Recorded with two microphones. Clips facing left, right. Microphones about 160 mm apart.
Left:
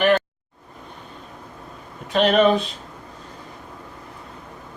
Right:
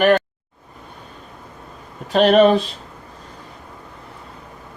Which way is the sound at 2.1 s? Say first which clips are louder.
Right 4 dB; 35° right (ahead or behind).